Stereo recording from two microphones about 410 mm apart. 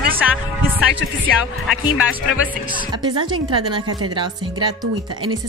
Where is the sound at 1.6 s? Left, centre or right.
Centre.